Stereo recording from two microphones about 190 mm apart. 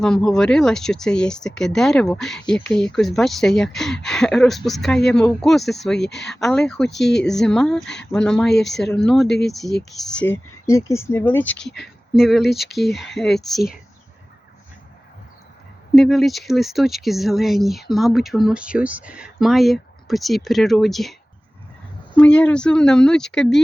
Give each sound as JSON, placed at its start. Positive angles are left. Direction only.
{"t": 0.0, "sound": "speech", "side_deg": 5}
{"t": 6.0, "sound": "speech", "side_deg": 65}
{"t": 6.4, "sound": "speech", "side_deg": 5}
{"t": 7.0, "sound": "speech", "side_deg": 65}
{"t": 7.3, "sound": "speech", "side_deg": 5}
{"t": 16.0, "sound": "speech", "side_deg": 0}